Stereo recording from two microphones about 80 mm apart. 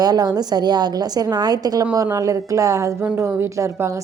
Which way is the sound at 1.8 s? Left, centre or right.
Right.